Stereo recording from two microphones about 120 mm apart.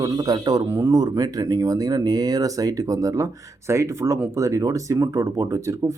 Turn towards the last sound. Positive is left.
turn(degrees=-25)  # may be behind; listen again after turning